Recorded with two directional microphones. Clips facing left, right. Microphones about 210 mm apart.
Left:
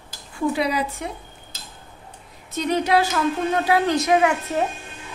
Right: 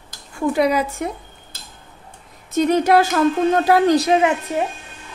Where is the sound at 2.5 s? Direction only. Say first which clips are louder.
Right 5 dB; 50° right (ahead or behind); by 4.3 s 30° right (ahead or behind).